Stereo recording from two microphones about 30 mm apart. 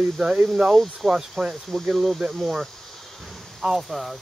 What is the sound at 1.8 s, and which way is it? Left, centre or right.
Speech, centre.